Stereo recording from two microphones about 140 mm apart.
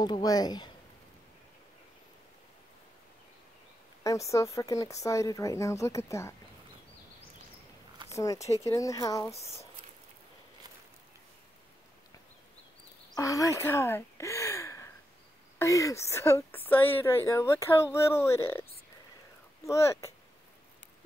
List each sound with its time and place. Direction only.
0.0 s a woman's voice: 30° left (ahead or behind)
4.0 s a woman's voice: 20° left (ahead or behind)
8.1 s a woman's voice: 25° left (ahead or behind)
13.1 s a woman's voice: 25° left (ahead or behind)